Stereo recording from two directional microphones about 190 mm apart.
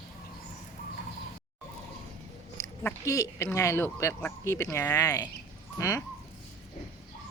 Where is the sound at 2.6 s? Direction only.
15° left (ahead or behind).